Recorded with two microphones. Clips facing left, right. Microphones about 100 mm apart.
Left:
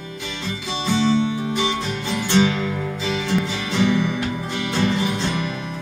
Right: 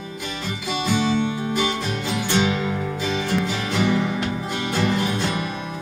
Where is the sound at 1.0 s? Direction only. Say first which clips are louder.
Left 5 dB; 5° right (ahead or behind).